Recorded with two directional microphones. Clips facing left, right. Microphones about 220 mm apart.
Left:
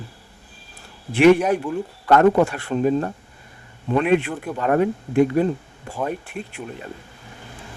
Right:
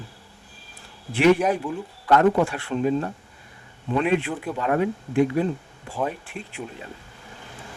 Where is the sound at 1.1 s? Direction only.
70° left (ahead or behind).